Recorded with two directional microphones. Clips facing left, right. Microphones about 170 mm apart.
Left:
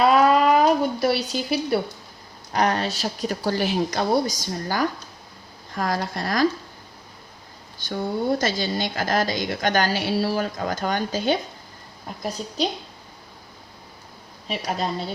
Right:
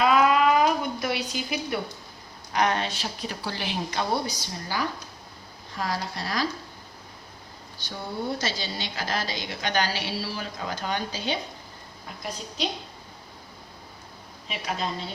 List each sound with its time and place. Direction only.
0.0 s a sound: 35° left (ahead or behind)
2.5 s a woman's voice: 40° left (ahead or behind)
7.9 s a woman's voice: 50° left (ahead or behind)
14.4 s a woman's voice: 40° left (ahead or behind)